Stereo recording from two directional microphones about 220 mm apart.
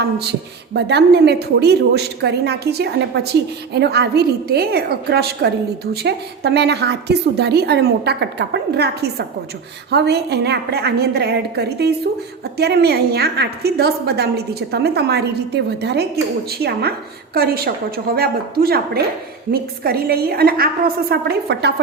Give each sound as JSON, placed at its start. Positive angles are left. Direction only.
{"t": 0.0, "sound": "a woman's voice", "side_deg": -50}